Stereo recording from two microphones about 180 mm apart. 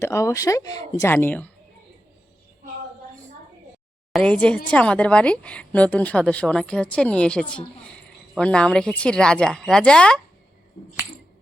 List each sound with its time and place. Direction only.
0.0 s a woman's voice: 15° left (ahead or behind)
4.1 s a woman's voice: 5° left (ahead or behind)